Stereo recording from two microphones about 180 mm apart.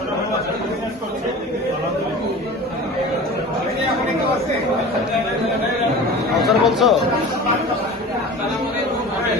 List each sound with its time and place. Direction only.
6.3 s speech: centre (ahead or behind)